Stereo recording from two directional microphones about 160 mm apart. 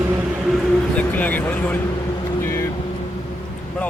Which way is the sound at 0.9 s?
10° left (ahead or behind).